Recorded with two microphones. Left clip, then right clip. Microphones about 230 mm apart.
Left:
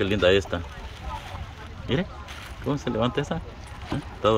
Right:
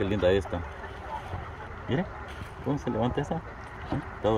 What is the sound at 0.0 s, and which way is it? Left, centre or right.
Speech, left.